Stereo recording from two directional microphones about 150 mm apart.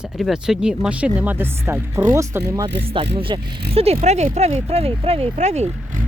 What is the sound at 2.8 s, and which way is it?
Speech, 35° right (ahead or behind).